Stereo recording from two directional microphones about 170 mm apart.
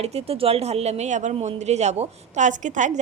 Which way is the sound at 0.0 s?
40° right (ahead or behind).